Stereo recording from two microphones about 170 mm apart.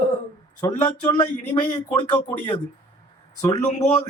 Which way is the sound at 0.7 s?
30° left (ahead or behind).